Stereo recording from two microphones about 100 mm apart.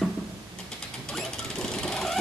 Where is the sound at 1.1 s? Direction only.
5° left (ahead or behind).